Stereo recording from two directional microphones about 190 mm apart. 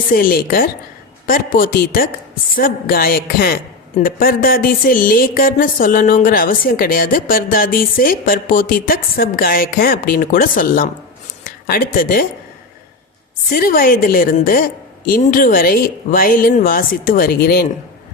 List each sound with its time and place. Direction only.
0.1 s a woman's voice: 50° left (ahead or behind)
13.5 s a woman's voice: 50° left (ahead or behind)